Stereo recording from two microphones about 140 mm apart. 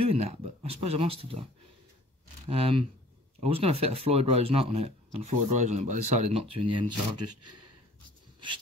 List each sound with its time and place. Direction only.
0.0 s speech: 45° right (ahead or behind)
2.5 s speech: 40° right (ahead or behind)